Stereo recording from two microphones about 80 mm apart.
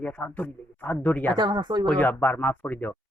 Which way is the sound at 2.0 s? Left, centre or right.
Left.